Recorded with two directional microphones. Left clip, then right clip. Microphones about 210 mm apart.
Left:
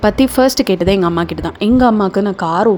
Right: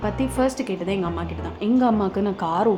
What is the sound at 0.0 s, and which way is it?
Speech, 45° left (ahead or behind).